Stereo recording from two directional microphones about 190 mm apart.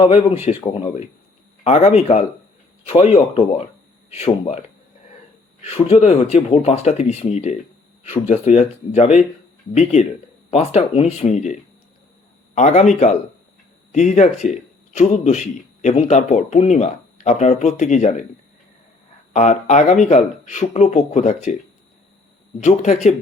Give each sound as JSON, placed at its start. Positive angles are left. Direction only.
{"t": 0.0, "sound": "speech", "side_deg": 25}
{"t": 5.6, "sound": "speech", "side_deg": 35}
{"t": 13.9, "sound": "speech", "side_deg": 40}
{"t": 19.3, "sound": "speech", "side_deg": 40}
{"t": 22.6, "sound": "speech", "side_deg": 40}